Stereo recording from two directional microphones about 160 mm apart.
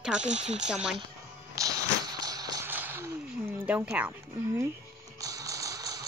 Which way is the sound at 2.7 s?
10° right (ahead or behind).